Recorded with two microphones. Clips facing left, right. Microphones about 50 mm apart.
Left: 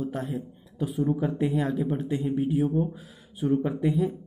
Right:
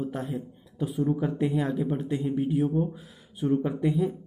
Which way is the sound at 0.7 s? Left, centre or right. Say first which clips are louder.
Even; centre.